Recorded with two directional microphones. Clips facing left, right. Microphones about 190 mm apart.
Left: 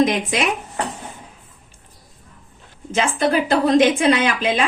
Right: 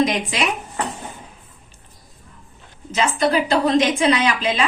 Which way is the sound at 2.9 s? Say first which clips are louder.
Even; 50° left (ahead or behind).